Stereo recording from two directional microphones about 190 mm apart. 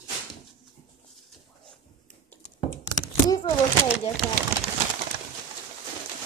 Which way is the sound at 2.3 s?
10° left (ahead or behind).